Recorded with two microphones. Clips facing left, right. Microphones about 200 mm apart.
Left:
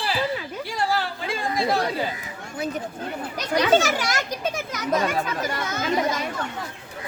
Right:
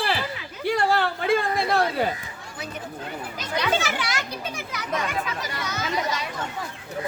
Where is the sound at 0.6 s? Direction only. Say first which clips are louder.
Right 5 dB; 60° right (ahead or behind).